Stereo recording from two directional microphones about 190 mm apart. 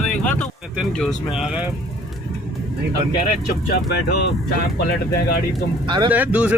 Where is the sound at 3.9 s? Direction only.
60° left (ahead or behind).